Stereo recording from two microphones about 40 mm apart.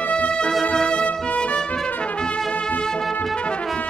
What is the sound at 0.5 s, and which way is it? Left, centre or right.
Music, centre.